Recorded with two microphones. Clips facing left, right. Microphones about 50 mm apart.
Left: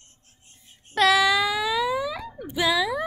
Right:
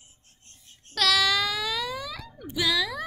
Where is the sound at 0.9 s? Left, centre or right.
Left.